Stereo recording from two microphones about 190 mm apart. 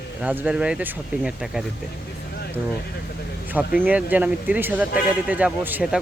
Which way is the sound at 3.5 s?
10° right (ahead or behind).